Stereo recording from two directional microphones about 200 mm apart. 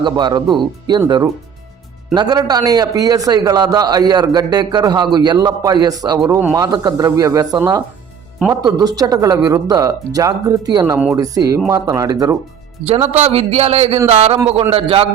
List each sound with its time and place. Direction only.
0.0 s a man's voice: 25° right (ahead or behind)
13.1 s speech: 30° right (ahead or behind)